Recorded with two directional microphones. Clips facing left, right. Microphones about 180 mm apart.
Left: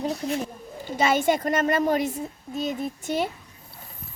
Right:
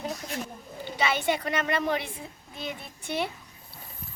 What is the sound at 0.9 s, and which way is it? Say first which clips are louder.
Speech: left 5 dB; 45° left (ahead or behind).